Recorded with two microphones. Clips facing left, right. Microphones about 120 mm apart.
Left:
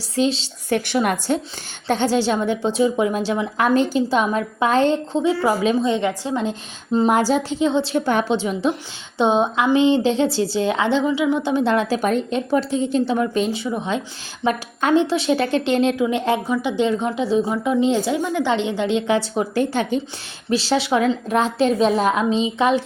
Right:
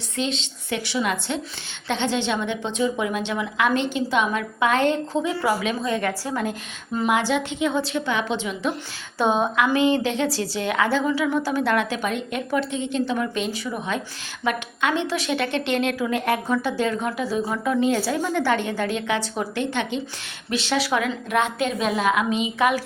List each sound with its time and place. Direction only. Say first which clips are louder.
0.2 s a woman's voice: left 7 dB; 35° left (ahead or behind)
0.9 s a woman's voice: left 3 dB; 50° left (ahead or behind); by 7.1 s 25° left (ahead or behind)
7.1 s a woman's voice: left 4 dB; 40° left (ahead or behind)
7.9 s a woman's voice: left 5 dB; 40° left (ahead or behind); by 22.8 s 25° left (ahead or behind)